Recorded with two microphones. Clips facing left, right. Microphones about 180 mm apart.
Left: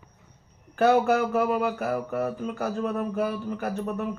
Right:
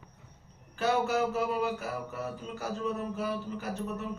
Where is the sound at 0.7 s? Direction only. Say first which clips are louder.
Left 7 dB; 55° left (ahead or behind).